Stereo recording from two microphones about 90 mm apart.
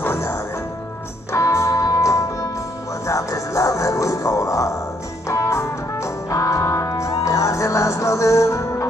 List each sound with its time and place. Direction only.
0.0 s music: 30° left (ahead or behind)